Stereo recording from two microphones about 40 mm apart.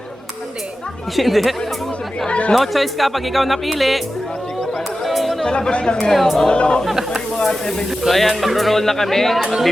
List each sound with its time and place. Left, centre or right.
1.1 s speech: centre
2.6 s speech: centre
5.0 s chatter: centre
5.5 s speech: left
6.0 s speech: centre
6.5 s speech: left
6.8 s speech: centre
7.3 s speech: centre
8.1 s speech: centre
9.4 s speech: centre